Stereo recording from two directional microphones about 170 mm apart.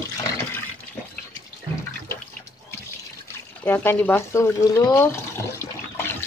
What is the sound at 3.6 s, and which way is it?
Speech, 10° left (ahead or behind).